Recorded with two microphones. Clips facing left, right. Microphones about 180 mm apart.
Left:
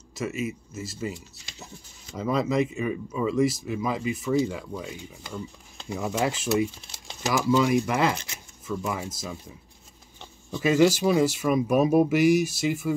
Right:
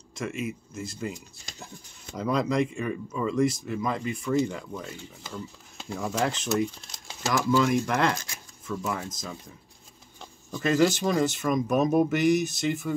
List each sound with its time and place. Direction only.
0.1 s speech: 5° left (ahead or behind)
1.1 s speech: 45° right (ahead or behind)
2.1 s speech: centre (ahead or behind)
10.6 s speech: 5° left (ahead or behind)